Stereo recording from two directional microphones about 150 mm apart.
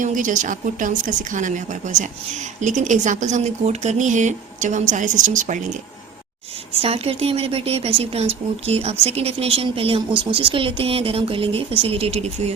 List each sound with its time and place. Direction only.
0.0 s speech: 60° right (ahead or behind)
6.8 s speech: 40° right (ahead or behind)